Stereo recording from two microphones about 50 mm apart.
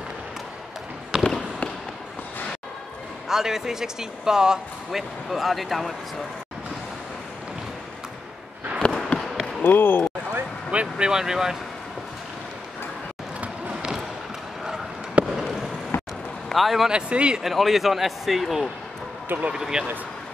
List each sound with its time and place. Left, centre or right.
1.1 s fireworks: centre
3.3 s speech: centre
8.7 s a sound: centre
9.6 s speech: left
10.7 s speech: right
15.2 s fireworks: right
15.9 s a sound: left
16.5 s speech: centre
16.9 s speech: centre
17.4 s speech: centre
19.2 s speech: right
19.5 s speech: centre